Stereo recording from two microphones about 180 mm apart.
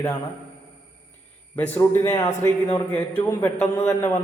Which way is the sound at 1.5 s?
10° left (ahead or behind).